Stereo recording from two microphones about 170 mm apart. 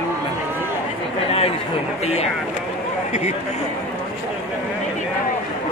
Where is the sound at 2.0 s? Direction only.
40° left (ahead or behind).